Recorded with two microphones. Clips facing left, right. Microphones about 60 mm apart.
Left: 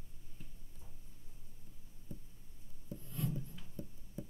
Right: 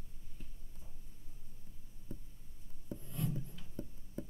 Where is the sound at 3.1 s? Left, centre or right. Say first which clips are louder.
Even; centre.